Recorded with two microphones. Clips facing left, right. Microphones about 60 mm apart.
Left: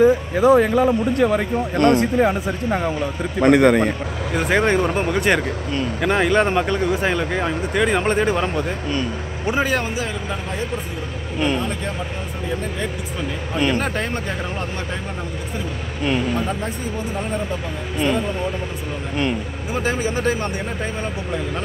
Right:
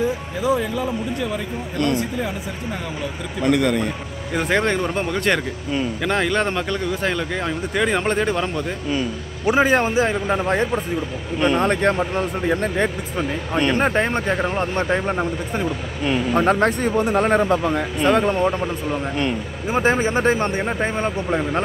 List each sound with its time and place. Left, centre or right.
0.0 s a man's voice: left
4.4 s speech: centre
9.5 s speech: right
11.5 s speech: right
13.7 s speech: right
14.8 s speech: right
16.0 s speech: centre
16.3 s a man's voice: right
18.0 s a man's voice: right
19.7 s speech: right